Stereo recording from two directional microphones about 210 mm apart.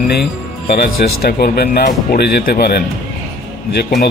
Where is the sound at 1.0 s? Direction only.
50° left (ahead or behind).